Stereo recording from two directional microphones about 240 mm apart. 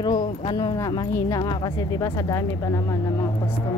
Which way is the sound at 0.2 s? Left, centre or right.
Left.